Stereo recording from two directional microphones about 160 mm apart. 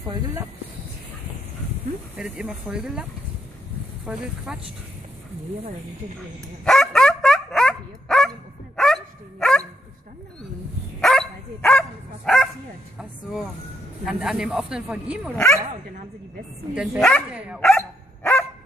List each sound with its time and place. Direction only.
0.1 s speech: 25° right (ahead or behind)
2.1 s speech: 5° right (ahead or behind)
6.6 s dog: centre (ahead or behind)
11.0 s dog: 5° left (ahead or behind)
12.3 s bow-wow: 5° left (ahead or behind)
14.0 s speech: 5° right (ahead or behind)
16.7 s speech: centre (ahead or behind)
17.6 s dog: 5° left (ahead or behind)